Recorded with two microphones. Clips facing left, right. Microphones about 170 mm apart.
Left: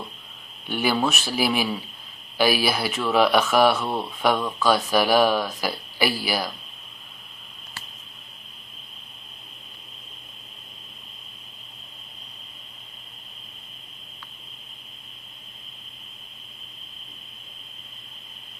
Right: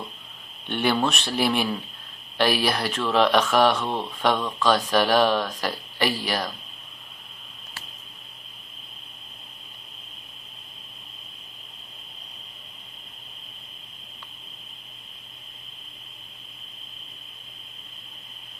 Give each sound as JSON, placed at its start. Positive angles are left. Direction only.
{"t": 0.7, "sound": "speech", "side_deg": 5}